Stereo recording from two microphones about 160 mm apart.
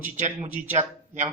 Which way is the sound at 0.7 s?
45° right (ahead or behind).